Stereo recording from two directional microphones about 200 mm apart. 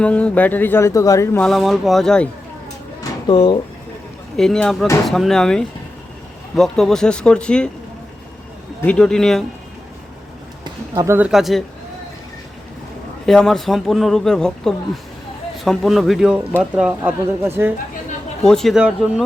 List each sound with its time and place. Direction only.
0.0 s a sound: 5° left (ahead or behind)
1.5 s a man's voice: centre (ahead or behind)
3.0 s drawer open or close: 25° left (ahead or behind)
4.4 s a man's voice: 5° left (ahead or behind)
8.8 s a man's voice: 5° left (ahead or behind)
10.6 s speech: 15° right (ahead or behind); by 11.6 s centre (ahead or behind)
13.2 s a man's voice: centre (ahead or behind)
18.4 s a man's voice: centre (ahead or behind)